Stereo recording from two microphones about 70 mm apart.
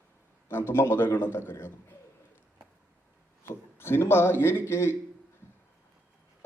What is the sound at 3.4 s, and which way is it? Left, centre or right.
A man's voice, left.